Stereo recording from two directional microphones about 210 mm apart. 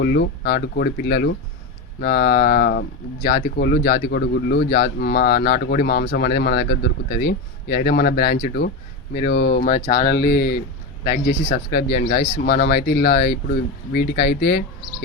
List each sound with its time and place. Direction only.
0.0 s speech: 50° left (ahead or behind)